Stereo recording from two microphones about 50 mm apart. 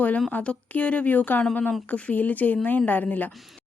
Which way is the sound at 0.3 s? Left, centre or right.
Left.